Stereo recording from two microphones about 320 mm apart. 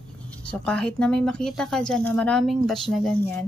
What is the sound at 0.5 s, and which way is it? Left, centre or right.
A woman's voice, centre.